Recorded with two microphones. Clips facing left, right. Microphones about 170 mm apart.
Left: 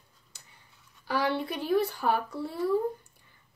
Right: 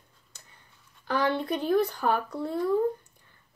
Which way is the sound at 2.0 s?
55° right (ahead or behind).